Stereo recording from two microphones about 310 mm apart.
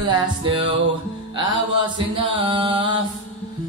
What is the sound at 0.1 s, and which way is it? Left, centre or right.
Music, centre.